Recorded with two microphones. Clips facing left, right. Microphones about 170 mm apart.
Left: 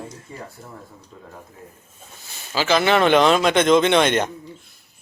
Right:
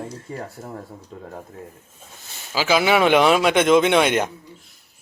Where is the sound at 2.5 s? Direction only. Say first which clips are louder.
Even; 10° right (ahead or behind).